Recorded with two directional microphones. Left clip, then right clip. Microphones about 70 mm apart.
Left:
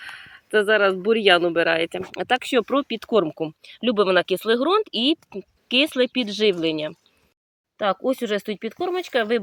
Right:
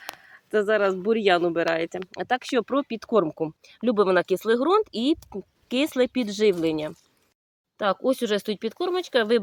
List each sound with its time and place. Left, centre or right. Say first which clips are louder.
0.0 s a sound: left 3 dB; right
1.0 s speech: left 4 dB; right; by 2.8 s centre
2.8 s speech: left 2 dB; right